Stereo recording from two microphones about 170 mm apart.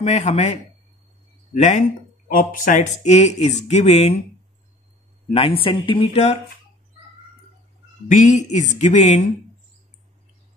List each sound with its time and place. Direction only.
0.0 s speech: 40° left (ahead or behind)
5.3 s speech: 35° left (ahead or behind)
8.1 s speech: 45° left (ahead or behind)